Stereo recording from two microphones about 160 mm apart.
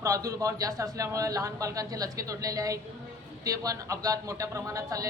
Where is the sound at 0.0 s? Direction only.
20° right (ahead or behind).